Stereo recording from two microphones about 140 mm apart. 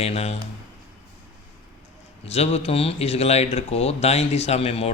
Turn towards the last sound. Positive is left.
turn(degrees=45)  # may be behind; listen again after turning